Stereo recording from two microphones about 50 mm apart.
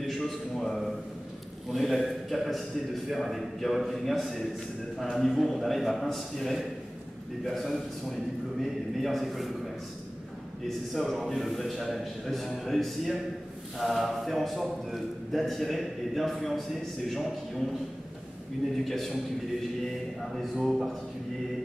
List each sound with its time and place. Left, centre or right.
0.0 s a sound: centre
1.7 s a man's voice: centre
10.9 s a man's voice: centre
18.9 s a man's voice: centre
20.5 s a man's voice: centre